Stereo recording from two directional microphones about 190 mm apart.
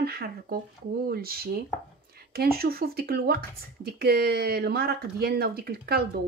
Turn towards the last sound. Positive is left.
turn(degrees=-55)  # may be behind; listen again after turning